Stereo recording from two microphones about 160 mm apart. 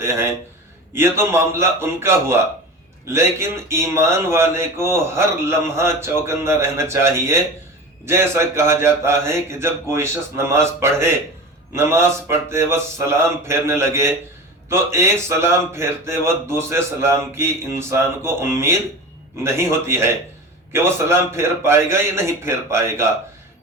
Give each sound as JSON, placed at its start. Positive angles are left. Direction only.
{"t": 0.0, "sound": "speech", "side_deg": -15}